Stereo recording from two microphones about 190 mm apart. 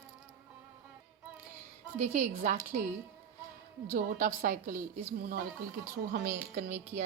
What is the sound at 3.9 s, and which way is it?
A woman's voice, 45° right (ahead or behind).